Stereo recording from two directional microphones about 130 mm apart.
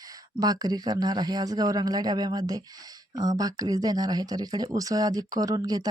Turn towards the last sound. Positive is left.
turn(degrees=-30)  # may be behind; listen again after turning